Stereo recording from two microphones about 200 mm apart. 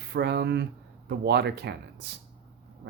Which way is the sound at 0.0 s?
55° right (ahead or behind).